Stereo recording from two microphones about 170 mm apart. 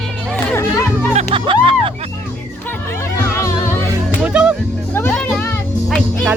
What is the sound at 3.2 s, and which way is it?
Music, 15° left (ahead or behind).